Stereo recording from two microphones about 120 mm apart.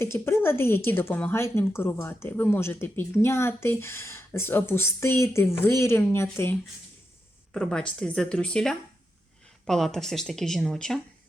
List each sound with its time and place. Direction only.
0.0 s a woman's voice: 20° left (ahead or behind)
7.5 s speech: 5° left (ahead or behind)